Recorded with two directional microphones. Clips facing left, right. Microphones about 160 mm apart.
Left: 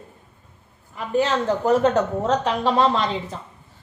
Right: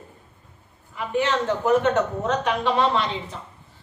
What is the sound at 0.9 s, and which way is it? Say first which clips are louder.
A woman's voice: left 2 dB; 40° left (ahead or behind).